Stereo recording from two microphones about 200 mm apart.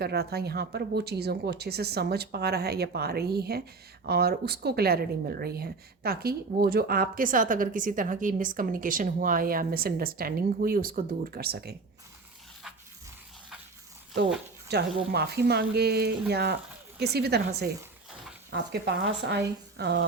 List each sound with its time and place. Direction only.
0.0 s speech: 55° right (ahead or behind)
14.7 s speech: 55° right (ahead or behind)